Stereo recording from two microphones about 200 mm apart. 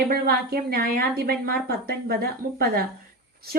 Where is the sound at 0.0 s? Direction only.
50° right (ahead or behind).